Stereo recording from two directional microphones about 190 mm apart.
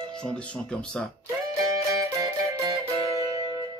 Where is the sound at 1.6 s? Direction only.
15° right (ahead or behind).